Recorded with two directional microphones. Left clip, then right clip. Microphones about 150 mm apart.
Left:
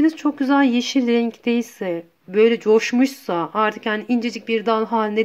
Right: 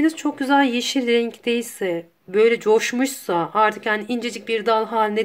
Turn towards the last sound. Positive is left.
turn(degrees=40)  # may be behind; listen again after turning